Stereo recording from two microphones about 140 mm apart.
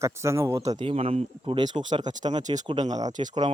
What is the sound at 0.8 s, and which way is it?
Speech, 45° right (ahead or behind).